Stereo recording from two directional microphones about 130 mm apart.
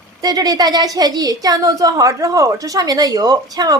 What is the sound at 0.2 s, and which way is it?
A woman's voice, 30° right (ahead or behind).